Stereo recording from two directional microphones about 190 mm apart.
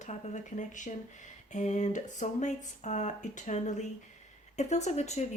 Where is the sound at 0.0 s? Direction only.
40° left (ahead or behind).